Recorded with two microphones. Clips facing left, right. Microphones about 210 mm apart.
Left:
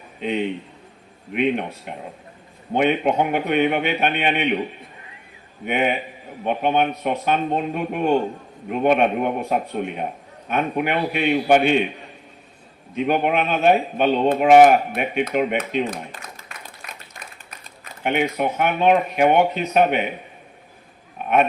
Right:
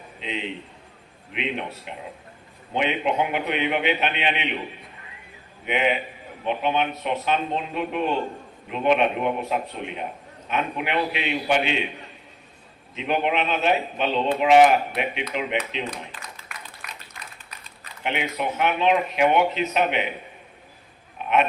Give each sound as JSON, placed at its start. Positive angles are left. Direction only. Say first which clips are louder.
{"t": 0.2, "sound": "speech", "louder": "left 8 dB", "side_deg": 50}
{"t": 5.6, "sound": "speech", "louder": "left 2 dB", "side_deg": 50}
{"t": 12.9, "sound": "speech", "louder": "left 4 dB", "side_deg": 50}
{"t": 16.8, "sound": "a sound", "louder": "left 2 dB", "side_deg": 25}
{"t": 18.0, "sound": "speech", "louder": "left 6 dB", "side_deg": 50}
{"t": 21.2, "sound": "pig", "louder": "left 3 dB", "side_deg": 50}